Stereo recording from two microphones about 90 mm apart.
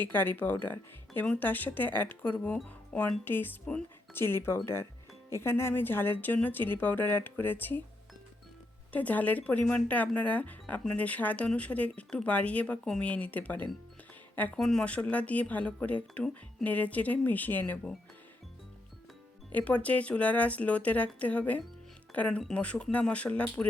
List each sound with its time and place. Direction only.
0.0 s a woman's voice: 20° left (ahead or behind)
8.9 s speech: 20° left (ahead or behind)
14.5 s a woman's voice: 5° left (ahead or behind); by 17.7 s 20° left (ahead or behind)
19.5 s speech: 15° left (ahead or behind)